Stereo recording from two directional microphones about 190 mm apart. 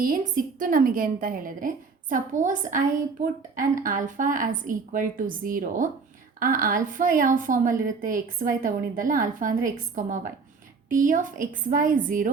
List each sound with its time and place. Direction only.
0.0 s a woman's voice: 45° right (ahead or behind)